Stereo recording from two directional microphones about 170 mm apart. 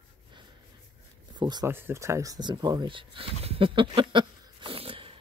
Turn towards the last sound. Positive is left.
turn(degrees=-30)  # may be behind; listen again after turning